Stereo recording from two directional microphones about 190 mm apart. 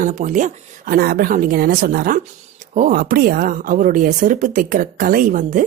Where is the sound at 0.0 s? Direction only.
40° right (ahead or behind).